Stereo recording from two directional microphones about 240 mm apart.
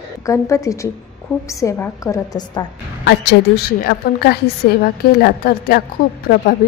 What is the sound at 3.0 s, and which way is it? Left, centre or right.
A woman's voice, left.